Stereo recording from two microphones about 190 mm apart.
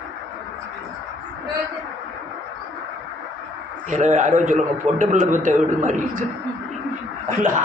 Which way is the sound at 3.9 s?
40° right (ahead or behind).